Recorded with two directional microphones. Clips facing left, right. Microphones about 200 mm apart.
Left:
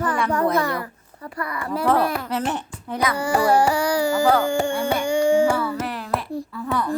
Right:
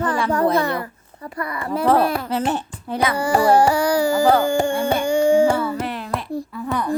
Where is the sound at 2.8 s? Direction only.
30° right (ahead or behind).